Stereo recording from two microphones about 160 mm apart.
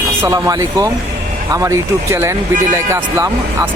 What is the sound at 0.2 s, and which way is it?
Speech, 20° right (ahead or behind).